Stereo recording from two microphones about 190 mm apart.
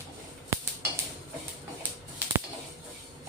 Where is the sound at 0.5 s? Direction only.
15° right (ahead or behind).